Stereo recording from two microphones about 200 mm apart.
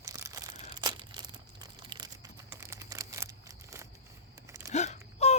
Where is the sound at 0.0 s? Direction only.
15° right (ahead or behind).